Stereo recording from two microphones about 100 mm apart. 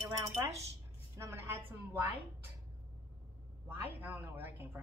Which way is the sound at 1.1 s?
25° right (ahead or behind).